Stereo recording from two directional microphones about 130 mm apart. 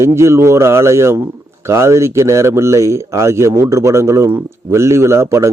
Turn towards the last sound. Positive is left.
turn(degrees=-20)  # may be behind; listen again after turning